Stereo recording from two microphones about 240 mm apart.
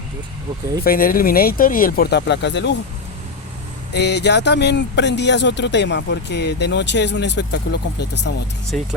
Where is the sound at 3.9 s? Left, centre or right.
Left.